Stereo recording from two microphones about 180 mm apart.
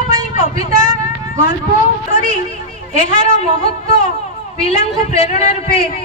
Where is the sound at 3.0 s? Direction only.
45° left (ahead or behind).